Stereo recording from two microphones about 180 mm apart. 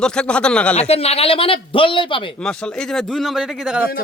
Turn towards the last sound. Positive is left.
turn(degrees=-5)  # may be behind; listen again after turning